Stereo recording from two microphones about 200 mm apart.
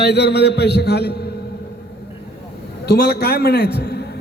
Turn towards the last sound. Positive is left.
turn(degrees=55)  # may be behind; listen again after turning